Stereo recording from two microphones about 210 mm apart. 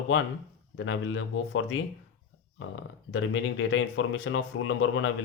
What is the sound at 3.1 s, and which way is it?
Speech, 65° left (ahead or behind).